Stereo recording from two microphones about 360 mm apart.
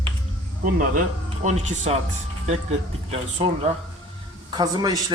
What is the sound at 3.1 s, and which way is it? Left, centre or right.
A man's voice, centre.